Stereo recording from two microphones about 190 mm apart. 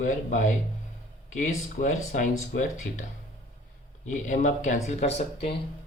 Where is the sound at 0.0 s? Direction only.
40° left (ahead or behind).